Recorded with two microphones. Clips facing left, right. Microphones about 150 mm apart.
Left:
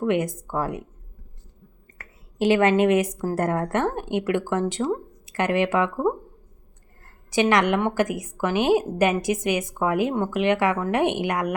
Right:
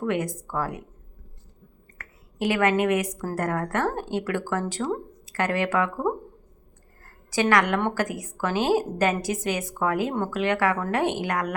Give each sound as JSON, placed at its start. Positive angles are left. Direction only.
{"t": 0.0, "sound": "a woman's voice", "side_deg": 20}
{"t": 2.0, "sound": "a woman's voice", "side_deg": 25}
{"t": 7.0, "sound": "a sound", "side_deg": 20}
{"t": 7.8, "sound": "a woman's voice", "side_deg": 15}